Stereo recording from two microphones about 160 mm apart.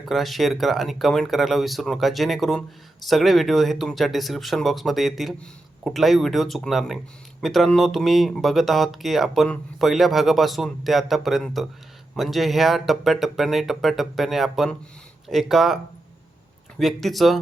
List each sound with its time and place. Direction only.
0.0 s speech: centre (ahead or behind)